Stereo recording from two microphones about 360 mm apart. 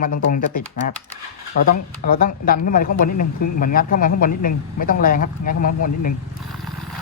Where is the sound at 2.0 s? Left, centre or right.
Left.